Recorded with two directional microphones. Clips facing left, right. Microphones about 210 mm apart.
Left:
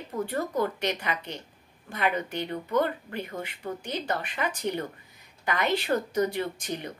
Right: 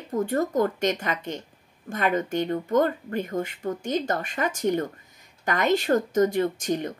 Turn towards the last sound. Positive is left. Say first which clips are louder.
# right 8 dB
turn(degrees=-45)  # may be behind; listen again after turning